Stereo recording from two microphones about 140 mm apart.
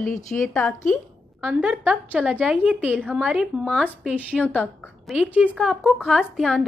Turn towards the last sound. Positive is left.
turn(degrees=0)  # may be behind; listen again after turning